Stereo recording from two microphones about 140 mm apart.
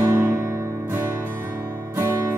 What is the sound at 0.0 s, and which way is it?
Music, 20° right (ahead or behind).